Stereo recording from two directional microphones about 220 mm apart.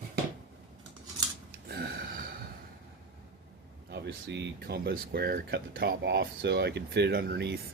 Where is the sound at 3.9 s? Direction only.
50° right (ahead or behind).